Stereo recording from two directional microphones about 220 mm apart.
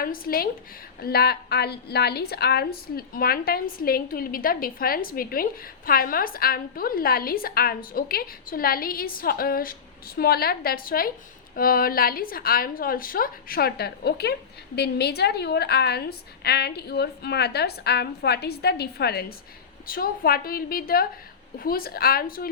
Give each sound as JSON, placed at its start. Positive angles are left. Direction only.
{"t": 0.0, "sound": "a woman's voice", "side_deg": 40}